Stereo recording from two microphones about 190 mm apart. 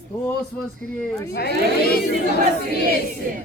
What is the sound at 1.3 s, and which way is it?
Speech, 55° left (ahead or behind).